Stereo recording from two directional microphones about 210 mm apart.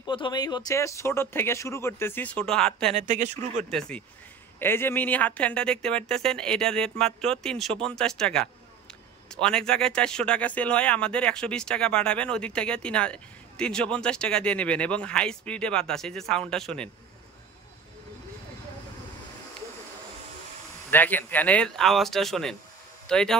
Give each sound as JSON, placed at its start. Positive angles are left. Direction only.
{"t": 0.0, "sound": "speech", "side_deg": 20}
{"t": 2.9, "sound": "speech", "side_deg": -35}
{"t": 3.7, "sound": "speech", "side_deg": 5}
{"t": 20.9, "sound": "speech", "side_deg": 10}